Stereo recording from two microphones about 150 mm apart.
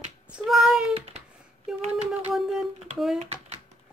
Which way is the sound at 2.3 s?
Centre (ahead or behind).